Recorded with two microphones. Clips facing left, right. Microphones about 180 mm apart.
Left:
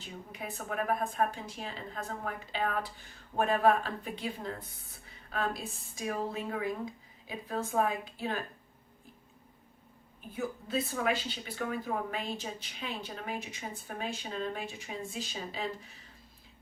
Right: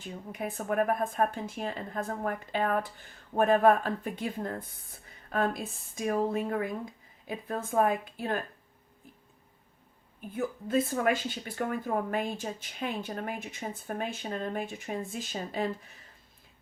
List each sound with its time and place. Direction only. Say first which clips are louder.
0.0 s speech: right 6 dB; 50° right (ahead or behind)
10.3 s speech: right 5 dB; 50° right (ahead or behind)